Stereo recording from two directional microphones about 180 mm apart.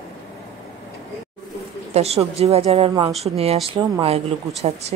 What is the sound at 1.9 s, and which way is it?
A woman's voice, 35° right (ahead or behind).